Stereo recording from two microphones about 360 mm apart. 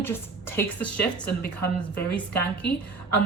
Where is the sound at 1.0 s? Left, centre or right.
Left.